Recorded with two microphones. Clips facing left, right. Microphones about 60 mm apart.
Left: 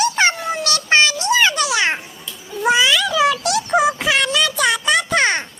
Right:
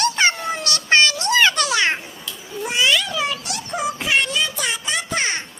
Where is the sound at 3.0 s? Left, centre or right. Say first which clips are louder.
Left 8 dB; left.